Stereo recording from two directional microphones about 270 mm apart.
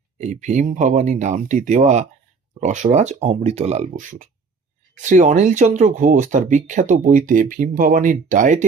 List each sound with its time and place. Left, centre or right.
0.2 s speech: right